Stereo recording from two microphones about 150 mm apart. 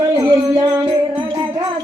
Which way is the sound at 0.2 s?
25° right (ahead or behind).